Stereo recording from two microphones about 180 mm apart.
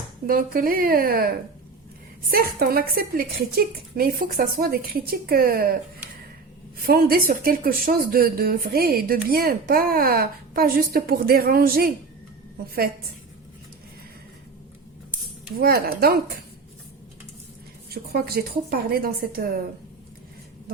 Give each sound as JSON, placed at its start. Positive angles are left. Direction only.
{"t": 0.3, "sound": "speech", "side_deg": -55}
{"t": 6.8, "sound": "speech", "side_deg": -55}
{"t": 15.5, "sound": "speech", "side_deg": -55}
{"t": 17.9, "sound": "speech", "side_deg": -60}